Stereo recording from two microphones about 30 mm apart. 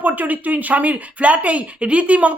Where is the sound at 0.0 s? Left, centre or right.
Right.